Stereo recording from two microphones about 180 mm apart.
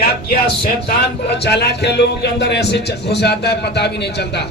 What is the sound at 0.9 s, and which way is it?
Speech, 65° left (ahead or behind).